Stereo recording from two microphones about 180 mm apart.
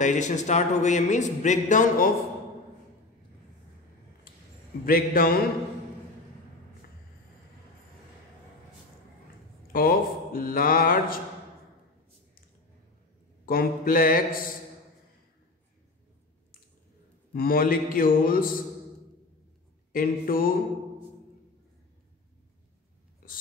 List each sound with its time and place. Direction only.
0.0 s a man's voice: 45° left (ahead or behind)
4.8 s mantra: 55° left (ahead or behind)
9.7 s a man's voice: 55° left (ahead or behind)
13.5 s a man's voice: 55° left (ahead or behind)
17.3 s a man's voice: 55° left (ahead or behind)
19.9 s a man's voice: 50° left (ahead or behind)